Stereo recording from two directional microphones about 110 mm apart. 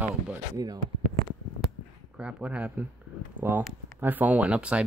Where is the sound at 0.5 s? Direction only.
35° right (ahead or behind).